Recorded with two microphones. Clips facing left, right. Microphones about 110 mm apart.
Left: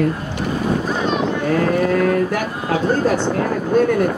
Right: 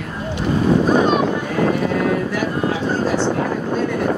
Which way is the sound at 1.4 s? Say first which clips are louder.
Left 2 dB; 55° left (ahead or behind).